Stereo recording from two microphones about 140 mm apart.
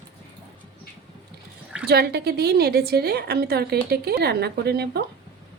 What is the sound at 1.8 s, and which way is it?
A woman's voice, 90° right.